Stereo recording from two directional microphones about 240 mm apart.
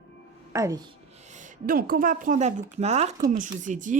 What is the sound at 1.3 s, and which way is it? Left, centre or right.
Speech, right.